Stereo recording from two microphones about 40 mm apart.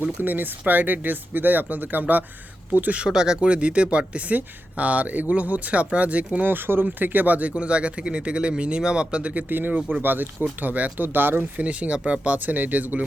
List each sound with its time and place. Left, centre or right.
0.0 s speech: right
3.1 s speech: centre
3.4 s speech: right
6.4 s speech: right
7.5 s speech: right
9.3 s speech: right
11.0 s speech: right
11.3 s speech: right